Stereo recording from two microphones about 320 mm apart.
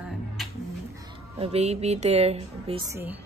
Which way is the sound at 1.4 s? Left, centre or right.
Centre.